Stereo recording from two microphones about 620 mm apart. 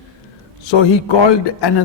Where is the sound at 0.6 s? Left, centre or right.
Left.